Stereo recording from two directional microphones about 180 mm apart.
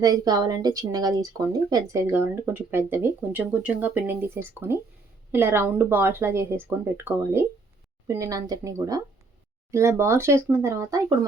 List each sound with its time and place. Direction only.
0.0 s speech: 20° right (ahead or behind)